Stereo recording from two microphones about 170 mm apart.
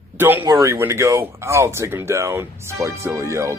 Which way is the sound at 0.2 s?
10° right (ahead or behind).